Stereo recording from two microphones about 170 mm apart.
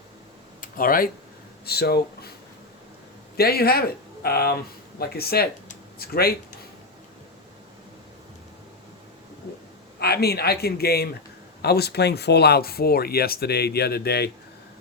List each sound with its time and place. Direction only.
0.6 s speech: 55° left (ahead or behind)
1.6 s speech: 70° left (ahead or behind)
3.3 s speech: 65° left (ahead or behind)
5.6 s a sound: 65° left (ahead or behind)
10.0 s speech: 70° left (ahead or behind)